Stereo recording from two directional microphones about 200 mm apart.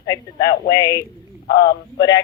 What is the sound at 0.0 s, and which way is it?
Speech, 20° left (ahead or behind).